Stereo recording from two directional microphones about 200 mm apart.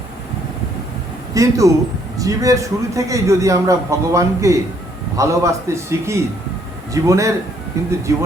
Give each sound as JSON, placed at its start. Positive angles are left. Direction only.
{"t": 1.3, "sound": "a man's voice", "side_deg": -15}